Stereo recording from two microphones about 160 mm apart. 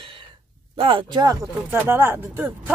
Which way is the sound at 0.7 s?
35° right (ahead or behind).